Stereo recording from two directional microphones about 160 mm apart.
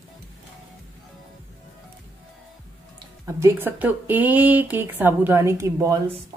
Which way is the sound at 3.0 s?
20° right (ahead or behind).